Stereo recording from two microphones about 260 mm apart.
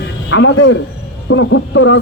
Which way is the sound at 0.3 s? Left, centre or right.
Left.